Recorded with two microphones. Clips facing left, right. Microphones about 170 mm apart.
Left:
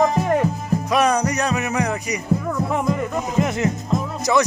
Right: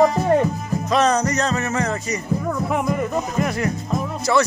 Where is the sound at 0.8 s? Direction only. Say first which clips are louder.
Right 1 dB; 10° left (ahead or behind).